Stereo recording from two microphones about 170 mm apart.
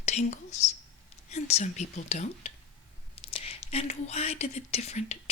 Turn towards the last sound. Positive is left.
turn(degrees=40)  # may be behind; listen again after turning